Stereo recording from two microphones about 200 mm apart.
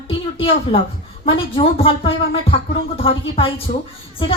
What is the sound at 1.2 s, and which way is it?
Speech, 25° left (ahead or behind).